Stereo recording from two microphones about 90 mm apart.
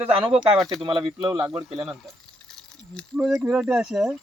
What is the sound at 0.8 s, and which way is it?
Speech, 65° right (ahead or behind).